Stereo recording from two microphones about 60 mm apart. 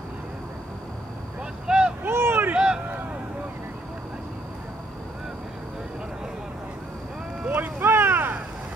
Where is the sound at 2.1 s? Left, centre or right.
Right.